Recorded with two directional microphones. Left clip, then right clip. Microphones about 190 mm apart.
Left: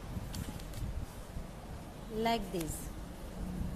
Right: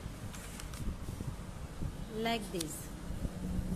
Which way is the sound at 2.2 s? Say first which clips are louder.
Left 2 dB; 5° left (ahead or behind).